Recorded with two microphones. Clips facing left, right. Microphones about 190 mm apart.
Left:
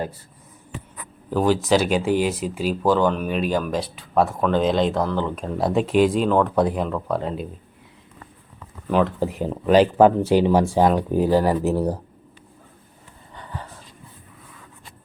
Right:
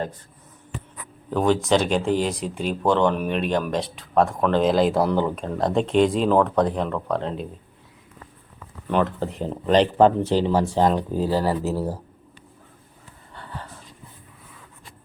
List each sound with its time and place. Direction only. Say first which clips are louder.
1.3 s speech: left 1 dB; 5° left (ahead or behind)
5.3 s speech: left 1 dB; centre (ahead or behind)
8.5 s speech: left 2 dB; centre (ahead or behind); by 11.9 s 20° left (ahead or behind)
13.3 s a sound: left 1 dB; 15° left (ahead or behind)